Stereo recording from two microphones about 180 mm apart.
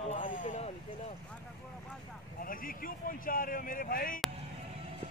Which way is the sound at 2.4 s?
50° left (ahead or behind).